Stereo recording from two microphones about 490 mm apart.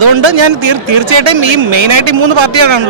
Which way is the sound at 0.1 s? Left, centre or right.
Right.